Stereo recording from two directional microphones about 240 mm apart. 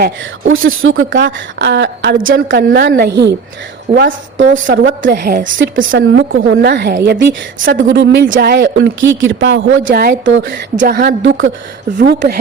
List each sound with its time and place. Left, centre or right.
0.5 s a woman's voice: right
5.5 s a woman's voice: right
5.9 s a woman's voice: right
10.8 s a woman's voice: right
11.9 s speech: right